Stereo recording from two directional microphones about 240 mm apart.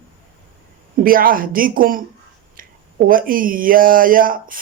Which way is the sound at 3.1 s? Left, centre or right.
Right.